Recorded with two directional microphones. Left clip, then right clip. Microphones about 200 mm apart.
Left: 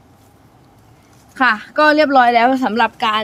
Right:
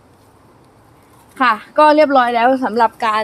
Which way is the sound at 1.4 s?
25° left (ahead or behind).